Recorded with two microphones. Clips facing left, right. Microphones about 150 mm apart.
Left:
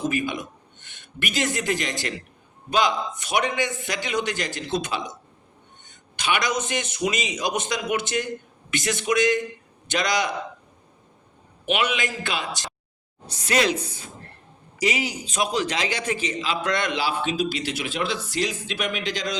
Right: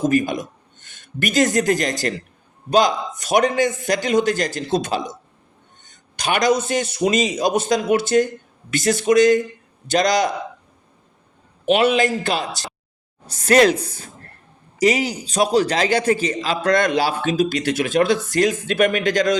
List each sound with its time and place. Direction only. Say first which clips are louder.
0.0 s a man's voice: right 7 dB; 40° right (ahead or behind)
6.1 s a man's voice: right 7 dB; 40° right (ahead or behind)
11.7 s a man's voice: right 9 dB; 35° right (ahead or behind)